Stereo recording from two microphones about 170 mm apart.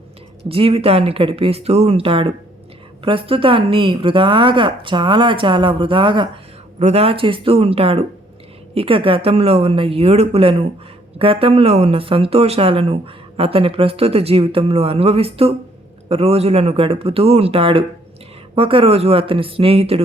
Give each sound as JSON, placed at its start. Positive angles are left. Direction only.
{"t": 0.4, "sound": "a woman's voice", "side_deg": -35}
{"t": 6.7, "sound": "speech", "side_deg": -40}